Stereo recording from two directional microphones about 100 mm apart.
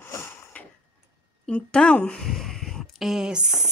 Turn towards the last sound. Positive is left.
turn(degrees=-10)  # may be behind; listen again after turning